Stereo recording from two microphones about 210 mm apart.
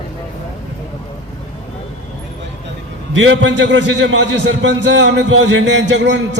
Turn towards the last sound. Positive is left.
turn(degrees=-55)  # may be behind; listen again after turning